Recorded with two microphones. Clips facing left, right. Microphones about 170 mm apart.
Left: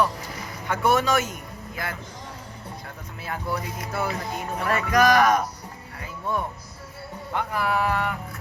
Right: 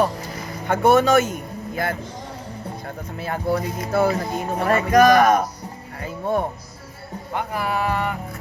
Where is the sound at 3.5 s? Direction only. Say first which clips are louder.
Right 8 dB; 30° right (ahead or behind).